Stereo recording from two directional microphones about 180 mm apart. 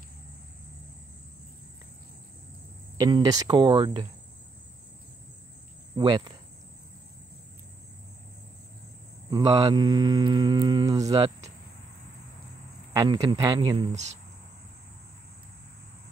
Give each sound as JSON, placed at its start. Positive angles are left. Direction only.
{"t": 3.0, "sound": "cricket", "side_deg": -25}
{"t": 5.9, "sound": "cricket", "side_deg": -25}
{"t": 9.3, "sound": "speech", "side_deg": -20}
{"t": 12.9, "sound": "cricket", "side_deg": -25}